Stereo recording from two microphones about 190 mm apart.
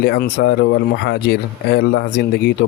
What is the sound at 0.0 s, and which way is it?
Speech, 55° left (ahead or behind).